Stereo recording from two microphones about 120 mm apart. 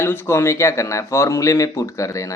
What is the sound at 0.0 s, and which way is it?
Speech, 20° left (ahead or behind).